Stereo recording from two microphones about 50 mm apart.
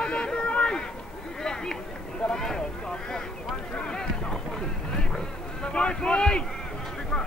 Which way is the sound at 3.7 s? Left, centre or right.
Centre.